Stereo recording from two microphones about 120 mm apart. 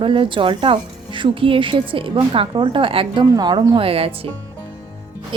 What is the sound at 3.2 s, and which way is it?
Speech, 35° right (ahead or behind).